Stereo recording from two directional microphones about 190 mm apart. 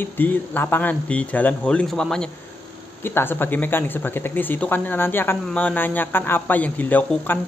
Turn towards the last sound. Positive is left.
turn(degrees=10)  # may be behind; listen again after turning